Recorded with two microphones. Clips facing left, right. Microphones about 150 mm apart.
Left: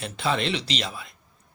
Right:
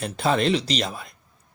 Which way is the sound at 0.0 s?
45° right (ahead or behind).